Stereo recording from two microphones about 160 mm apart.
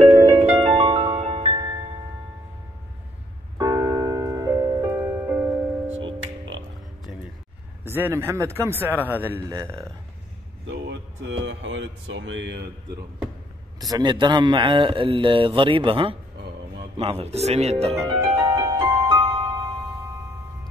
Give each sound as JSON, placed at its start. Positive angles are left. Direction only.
{"t": 0.4, "sound": "music", "side_deg": -35}
{"t": 3.5, "sound": "music", "side_deg": -20}
{"t": 7.8, "sound": "speech", "side_deg": -15}
{"t": 13.7, "sound": "a man's voice", "side_deg": -25}
{"t": 18.0, "sound": "music", "side_deg": -20}